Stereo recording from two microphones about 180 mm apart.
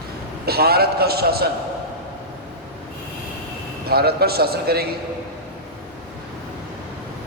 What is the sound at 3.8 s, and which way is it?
A man's voice, 60° right (ahead or behind).